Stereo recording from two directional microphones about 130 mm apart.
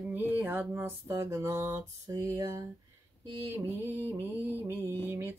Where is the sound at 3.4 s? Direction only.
15° right (ahead or behind).